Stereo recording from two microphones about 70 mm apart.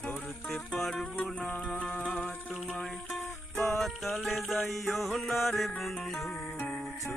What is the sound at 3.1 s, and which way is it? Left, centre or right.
Music, centre.